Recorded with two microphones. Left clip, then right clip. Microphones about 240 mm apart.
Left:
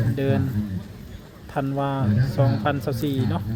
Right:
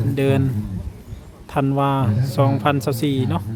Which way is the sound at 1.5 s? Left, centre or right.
Centre.